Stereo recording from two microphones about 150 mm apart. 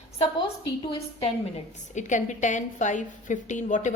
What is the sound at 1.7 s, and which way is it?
A woman's voice, 55° left (ahead or behind).